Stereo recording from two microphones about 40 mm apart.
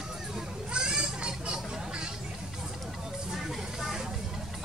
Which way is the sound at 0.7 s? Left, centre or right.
Right.